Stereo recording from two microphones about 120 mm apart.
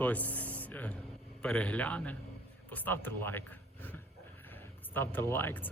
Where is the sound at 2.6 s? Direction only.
15° left (ahead or behind).